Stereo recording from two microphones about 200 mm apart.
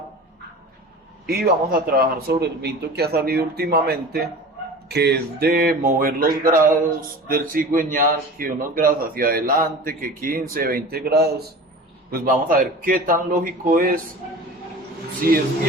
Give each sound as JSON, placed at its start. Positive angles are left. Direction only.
{"t": 1.3, "sound": "a man's voice", "side_deg": -50}
{"t": 15.2, "sound": "a man's voice", "side_deg": -45}